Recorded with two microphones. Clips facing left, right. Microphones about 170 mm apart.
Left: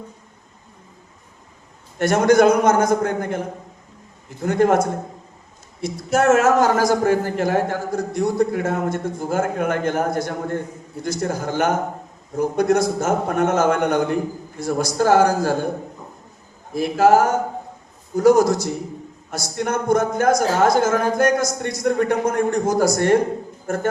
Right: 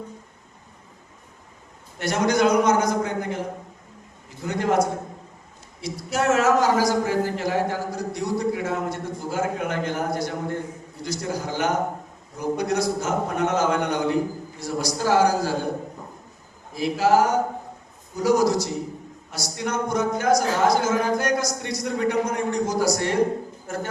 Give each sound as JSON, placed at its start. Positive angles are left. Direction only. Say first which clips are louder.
{"t": 2.0, "sound": "a man's voice", "louder": "left 7 dB", "side_deg": 50}
{"t": 4.4, "sound": "a man's voice", "louder": "left 5 dB", "side_deg": 50}
{"t": 16.7, "sound": "a man's voice", "louder": "left 4 dB", "side_deg": 50}